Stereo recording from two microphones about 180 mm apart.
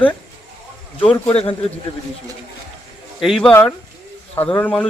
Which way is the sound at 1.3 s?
35° left (ahead or behind).